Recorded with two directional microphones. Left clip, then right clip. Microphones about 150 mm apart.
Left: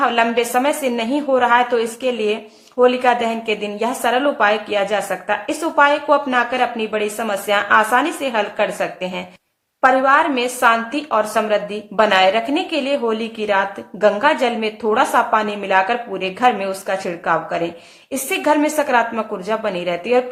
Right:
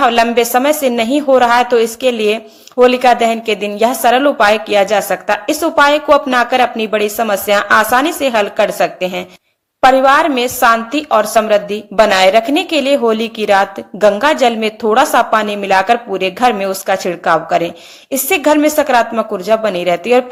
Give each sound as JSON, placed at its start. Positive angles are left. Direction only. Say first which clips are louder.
{"t": 0.0, "sound": "a woman's voice", "louder": "right 6 dB", "side_deg": -30}